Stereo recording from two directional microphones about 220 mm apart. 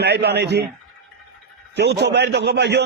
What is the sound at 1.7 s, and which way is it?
A man's voice, 50° right (ahead or behind).